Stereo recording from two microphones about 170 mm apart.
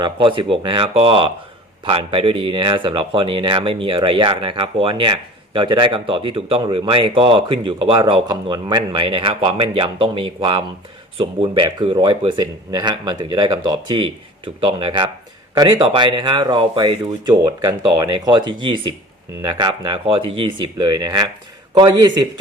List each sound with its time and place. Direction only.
0.0 s speech: 30° right (ahead or behind)